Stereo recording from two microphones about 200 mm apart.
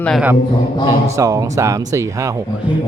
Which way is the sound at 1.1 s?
15° right (ahead or behind).